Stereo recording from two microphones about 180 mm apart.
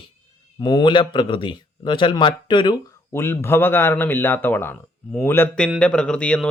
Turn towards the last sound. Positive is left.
turn(degrees=5)  # may be behind; listen again after turning